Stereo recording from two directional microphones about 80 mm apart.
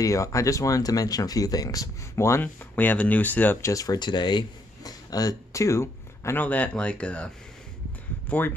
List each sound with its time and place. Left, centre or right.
0.0 s speech: left
2.4 s speech: left
3.6 s speech: left
6.3 s speech: centre
8.3 s speech: left